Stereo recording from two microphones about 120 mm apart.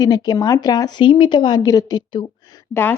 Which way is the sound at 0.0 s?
35° left (ahead or behind).